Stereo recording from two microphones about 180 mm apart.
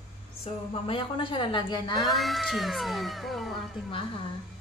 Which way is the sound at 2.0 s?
Centre (ahead or behind).